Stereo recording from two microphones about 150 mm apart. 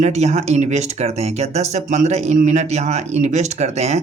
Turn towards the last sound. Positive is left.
turn(degrees=-45)  # may be behind; listen again after turning